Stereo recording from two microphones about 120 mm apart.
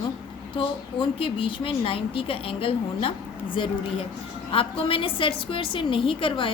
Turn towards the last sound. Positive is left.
turn(degrees=45)  # may be behind; listen again after turning